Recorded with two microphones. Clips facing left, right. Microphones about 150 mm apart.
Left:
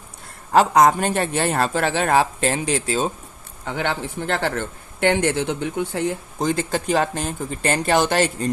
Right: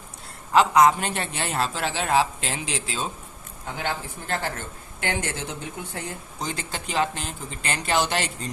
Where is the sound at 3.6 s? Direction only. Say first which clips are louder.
Left 5 dB; 75° left (ahead or behind).